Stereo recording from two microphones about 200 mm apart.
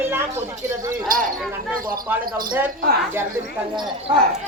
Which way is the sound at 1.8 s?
45° right (ahead or behind).